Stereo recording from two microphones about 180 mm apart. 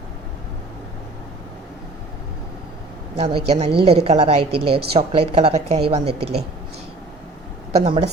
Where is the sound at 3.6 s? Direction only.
30° right (ahead or behind).